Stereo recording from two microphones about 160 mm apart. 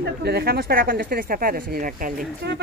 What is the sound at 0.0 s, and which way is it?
Speech, 90° right.